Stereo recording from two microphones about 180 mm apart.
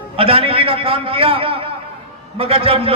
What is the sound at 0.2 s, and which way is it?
A man's voice, 30° right (ahead or behind).